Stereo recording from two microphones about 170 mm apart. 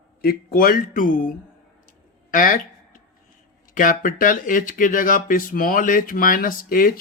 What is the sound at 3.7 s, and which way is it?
Speech, 50° left (ahead or behind).